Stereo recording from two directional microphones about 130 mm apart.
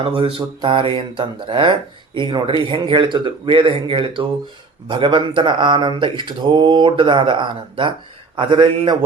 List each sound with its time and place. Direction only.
0.0 s speech: 45° right (ahead or behind)